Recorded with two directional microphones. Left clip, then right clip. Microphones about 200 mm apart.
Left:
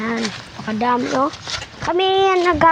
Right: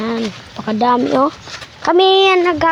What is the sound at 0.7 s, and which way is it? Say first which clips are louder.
Speech: right 5 dB; 30° right (ahead or behind).